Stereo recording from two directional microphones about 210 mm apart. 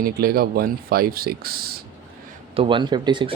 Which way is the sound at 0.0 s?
45° right (ahead or behind).